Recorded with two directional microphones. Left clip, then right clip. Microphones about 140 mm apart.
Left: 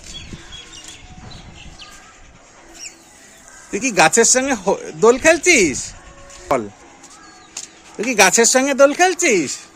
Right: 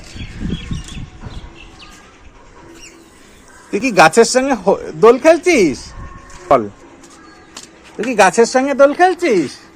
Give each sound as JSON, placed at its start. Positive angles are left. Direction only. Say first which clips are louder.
{"t": 3.7, "sound": "speech", "louder": "right 4 dB", "side_deg": 25}
{"t": 7.9, "sound": "speech", "louder": "right 3 dB", "side_deg": 45}